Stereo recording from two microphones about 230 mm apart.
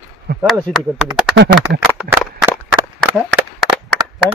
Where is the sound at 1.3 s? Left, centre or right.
Right.